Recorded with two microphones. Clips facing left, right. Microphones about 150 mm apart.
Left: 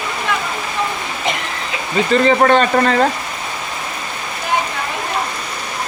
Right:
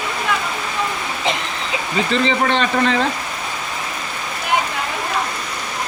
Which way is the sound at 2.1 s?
45° left (ahead or behind).